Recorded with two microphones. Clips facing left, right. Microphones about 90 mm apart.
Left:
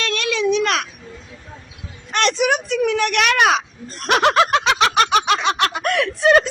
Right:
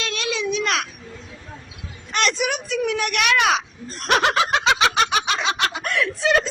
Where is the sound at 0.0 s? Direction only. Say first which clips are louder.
Left 5 dB; 60° left (ahead or behind).